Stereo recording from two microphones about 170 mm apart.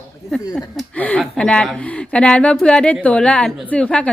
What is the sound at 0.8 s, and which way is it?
Speech, 10° left (ahead or behind).